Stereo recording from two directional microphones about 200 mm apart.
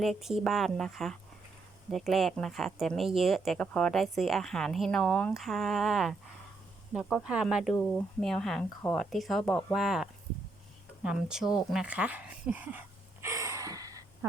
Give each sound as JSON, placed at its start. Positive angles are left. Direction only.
{"t": 0.0, "sound": "speech", "side_deg": 0}
{"t": 13.2, "sound": "gasp", "side_deg": -15}